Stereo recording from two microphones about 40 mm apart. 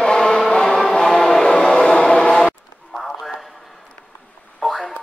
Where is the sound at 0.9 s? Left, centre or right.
Centre.